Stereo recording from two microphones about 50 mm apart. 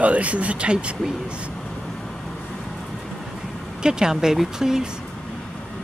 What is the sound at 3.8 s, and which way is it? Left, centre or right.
Speech, centre.